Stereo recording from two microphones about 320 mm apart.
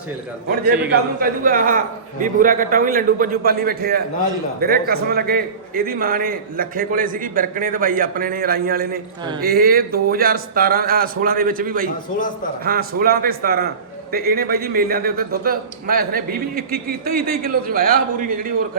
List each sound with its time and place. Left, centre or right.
0.9 s a man's voice: right